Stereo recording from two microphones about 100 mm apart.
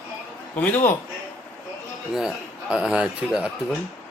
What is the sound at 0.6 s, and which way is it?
Speech, 20° left (ahead or behind).